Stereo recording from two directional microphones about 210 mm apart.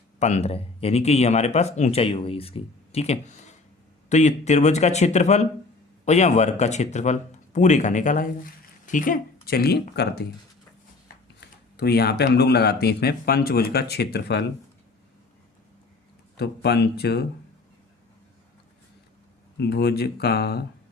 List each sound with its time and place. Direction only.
0.2 s speech: 35° left (ahead or behind); by 10.2 s 50° left (ahead or behind)
11.3 s speech: 50° left (ahead or behind)
16.4 s speech: 50° left (ahead or behind)
19.5 s speech: 50° left (ahead or behind)